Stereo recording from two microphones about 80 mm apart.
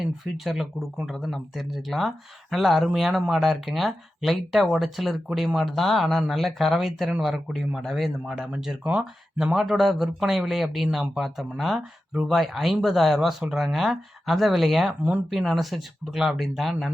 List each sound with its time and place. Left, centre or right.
0.0 s speech: centre